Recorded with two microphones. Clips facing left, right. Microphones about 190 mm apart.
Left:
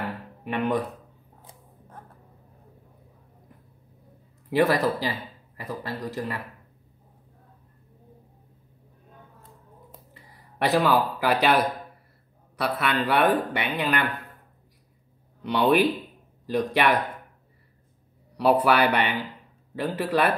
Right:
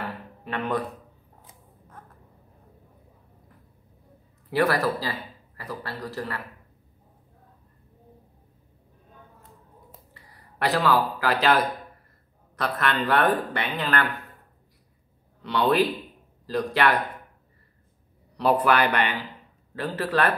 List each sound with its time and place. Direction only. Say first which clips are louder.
0.0 s a sound: left 2 dB; 15° left (ahead or behind)
4.5 s speech: left 2 dB; 20° left (ahead or behind)
10.6 s speech: left 1 dB; 20° left (ahead or behind)
15.4 s speech: left 2 dB; 15° left (ahead or behind)
18.4 s speech: left 1 dB; 10° left (ahead or behind)